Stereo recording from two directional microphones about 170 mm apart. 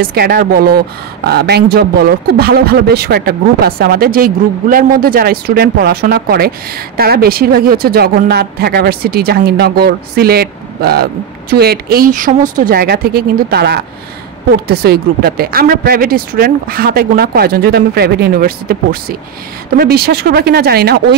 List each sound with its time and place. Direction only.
0.0 s a woman's voice: 65° right (ahead or behind)